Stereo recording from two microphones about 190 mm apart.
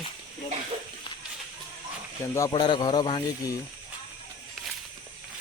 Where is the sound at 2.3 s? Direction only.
20° left (ahead or behind).